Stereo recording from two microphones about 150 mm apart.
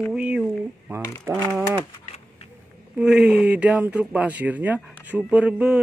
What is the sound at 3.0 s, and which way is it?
Speech, 5° right (ahead or behind).